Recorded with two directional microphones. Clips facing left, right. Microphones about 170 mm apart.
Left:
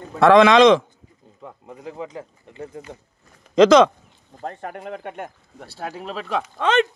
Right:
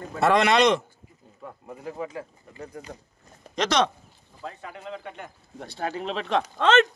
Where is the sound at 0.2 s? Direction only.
90° left.